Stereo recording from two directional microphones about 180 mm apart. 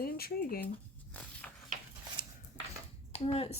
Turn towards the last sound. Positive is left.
turn(degrees=30)  # may be behind; listen again after turning